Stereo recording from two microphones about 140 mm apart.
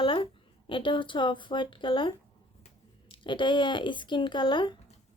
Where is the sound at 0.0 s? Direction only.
40° left (ahead or behind).